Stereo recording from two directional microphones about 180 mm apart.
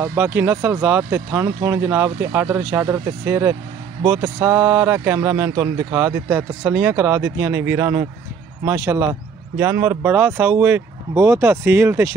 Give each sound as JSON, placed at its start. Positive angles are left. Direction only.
{"t": 0.0, "sound": "speech", "side_deg": -15}